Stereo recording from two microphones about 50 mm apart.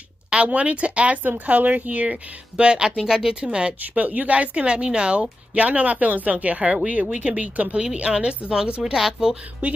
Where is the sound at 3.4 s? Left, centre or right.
Right.